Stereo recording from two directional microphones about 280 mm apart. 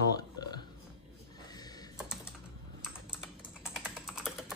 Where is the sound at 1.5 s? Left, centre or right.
Centre.